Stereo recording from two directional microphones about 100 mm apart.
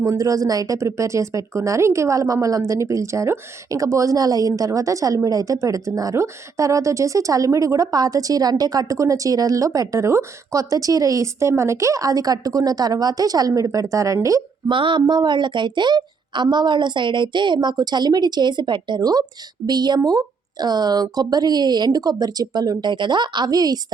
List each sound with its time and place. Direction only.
0.0 s speech: 35° right (ahead or behind)
14.7 s a woman's voice: 55° right (ahead or behind); by 23.8 s 40° right (ahead or behind)